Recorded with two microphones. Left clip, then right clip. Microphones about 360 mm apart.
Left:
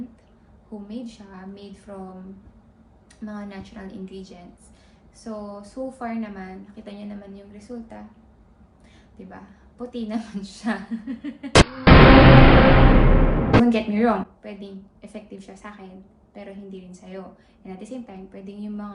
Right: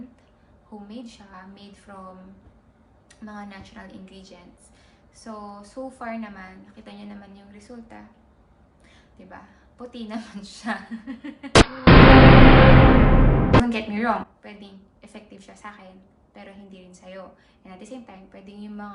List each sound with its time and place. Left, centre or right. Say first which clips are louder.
0.9 s a woman's voice: left 5 dB; centre
3.2 s a woman's voice: left 2 dB; centre
9.1 s a woman's voice: left 1 dB; centre